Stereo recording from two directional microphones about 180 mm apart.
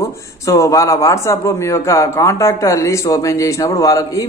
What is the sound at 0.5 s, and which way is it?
A man's voice, 15° left (ahead or behind).